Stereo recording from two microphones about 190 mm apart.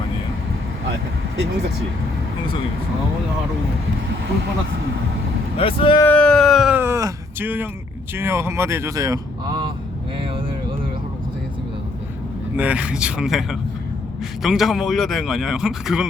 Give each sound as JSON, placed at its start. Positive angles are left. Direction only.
{"t": 5.5, "sound": "speech", "side_deg": 25}
{"t": 6.1, "sound": "speech", "side_deg": 5}
{"t": 10.2, "sound": "vehicle", "side_deg": -25}
{"t": 12.5, "sound": "speech", "side_deg": -5}